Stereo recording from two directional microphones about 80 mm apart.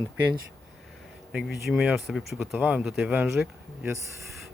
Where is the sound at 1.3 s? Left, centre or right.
Centre.